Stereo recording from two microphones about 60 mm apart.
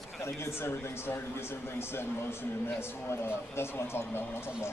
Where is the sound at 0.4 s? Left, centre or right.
Left.